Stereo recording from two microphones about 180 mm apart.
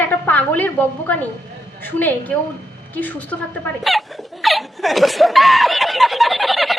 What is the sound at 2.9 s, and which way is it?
Hiccup, 10° left (ahead or behind).